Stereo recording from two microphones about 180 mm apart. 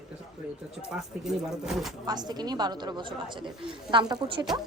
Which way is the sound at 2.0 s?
20° right (ahead or behind).